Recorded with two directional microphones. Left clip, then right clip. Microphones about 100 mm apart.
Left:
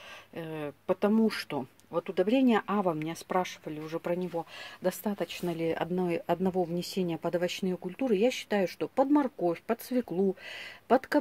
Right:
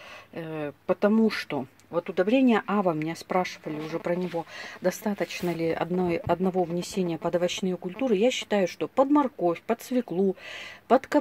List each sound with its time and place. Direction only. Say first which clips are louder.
0.4 s speech: right 4 dB; 20° left (ahead or behind)
2.6 s speech: right 4 dB; 10° left (ahead or behind); by 11.1 s 25° left (ahead or behind)